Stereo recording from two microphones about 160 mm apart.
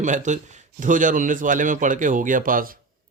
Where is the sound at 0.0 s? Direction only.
50° right (ahead or behind).